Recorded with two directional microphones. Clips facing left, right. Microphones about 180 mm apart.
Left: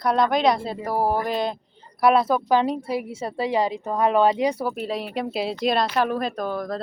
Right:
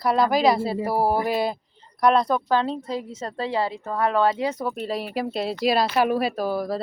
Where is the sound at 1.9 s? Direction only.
5° left (ahead or behind).